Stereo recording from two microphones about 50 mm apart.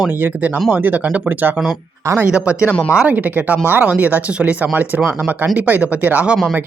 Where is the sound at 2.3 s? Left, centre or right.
Right.